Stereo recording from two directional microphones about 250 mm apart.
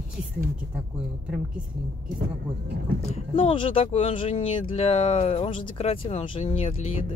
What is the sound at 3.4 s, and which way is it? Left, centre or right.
Speech, left.